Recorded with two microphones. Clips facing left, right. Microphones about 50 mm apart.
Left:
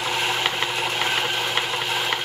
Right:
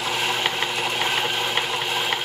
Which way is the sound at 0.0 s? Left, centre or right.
Centre.